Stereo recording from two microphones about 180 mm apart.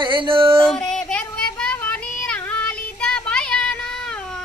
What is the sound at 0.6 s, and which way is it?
Child singing, 5° left (ahead or behind).